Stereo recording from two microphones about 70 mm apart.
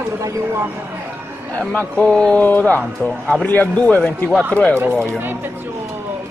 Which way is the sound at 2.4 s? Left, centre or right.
Left.